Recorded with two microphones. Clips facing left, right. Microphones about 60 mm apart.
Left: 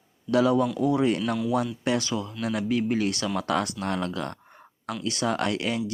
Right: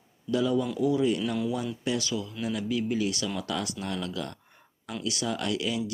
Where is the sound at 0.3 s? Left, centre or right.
Left.